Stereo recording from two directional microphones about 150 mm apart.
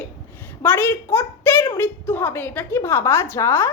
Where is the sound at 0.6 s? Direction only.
15° left (ahead or behind).